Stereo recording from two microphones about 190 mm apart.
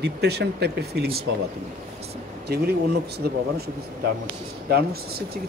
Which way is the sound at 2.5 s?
55° right (ahead or behind).